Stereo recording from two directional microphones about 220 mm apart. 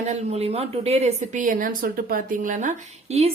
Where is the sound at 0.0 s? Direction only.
30° right (ahead or behind).